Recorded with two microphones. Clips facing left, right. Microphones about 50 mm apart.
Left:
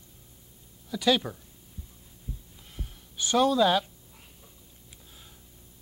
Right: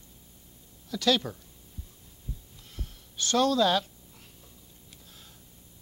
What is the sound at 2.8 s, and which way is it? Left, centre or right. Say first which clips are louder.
Speech: even; centre.